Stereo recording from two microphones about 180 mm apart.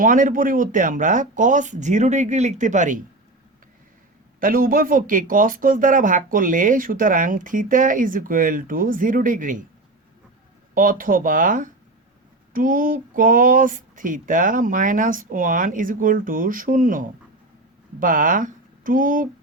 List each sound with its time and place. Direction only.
0.0 s speech: 45° right (ahead or behind)
4.4 s speech: 50° right (ahead or behind)
10.8 s speech: 50° right (ahead or behind)